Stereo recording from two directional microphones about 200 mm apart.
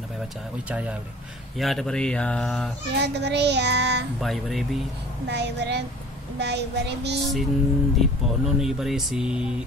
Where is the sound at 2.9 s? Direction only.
55° right (ahead or behind).